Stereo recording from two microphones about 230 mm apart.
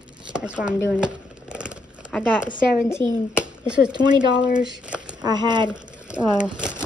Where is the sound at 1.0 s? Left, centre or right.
Centre.